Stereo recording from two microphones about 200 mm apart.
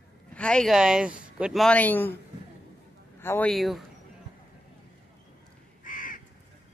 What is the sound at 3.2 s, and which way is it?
Speech, 10° left (ahead or behind).